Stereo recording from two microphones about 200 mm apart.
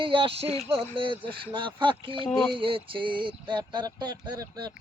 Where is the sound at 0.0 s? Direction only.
25° right (ahead or behind).